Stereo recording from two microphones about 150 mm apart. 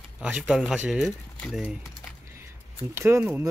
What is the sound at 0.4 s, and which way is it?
Speech, centre (ahead or behind).